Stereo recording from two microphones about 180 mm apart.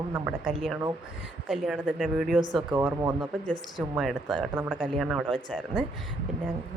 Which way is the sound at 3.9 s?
Centre (ahead or behind).